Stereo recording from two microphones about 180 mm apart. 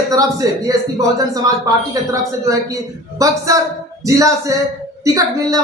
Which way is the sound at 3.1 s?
20° right (ahead or behind).